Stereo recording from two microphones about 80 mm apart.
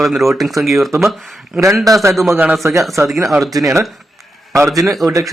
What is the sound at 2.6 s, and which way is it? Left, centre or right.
Speech, right.